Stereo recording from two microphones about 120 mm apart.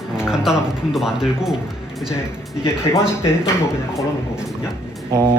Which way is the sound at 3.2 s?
20° left (ahead or behind).